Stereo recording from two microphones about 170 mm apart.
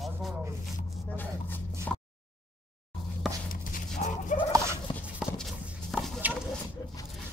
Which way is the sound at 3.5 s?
50° left (ahead or behind).